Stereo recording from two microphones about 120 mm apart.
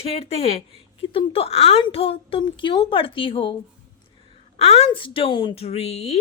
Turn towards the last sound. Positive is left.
turn(degrees=60)  # may be behind; listen again after turning